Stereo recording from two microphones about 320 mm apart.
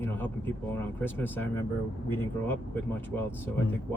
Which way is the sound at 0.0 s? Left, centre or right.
Centre.